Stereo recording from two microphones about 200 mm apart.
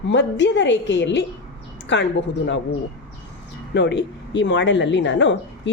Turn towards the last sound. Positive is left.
turn(degrees=65)  # may be behind; listen again after turning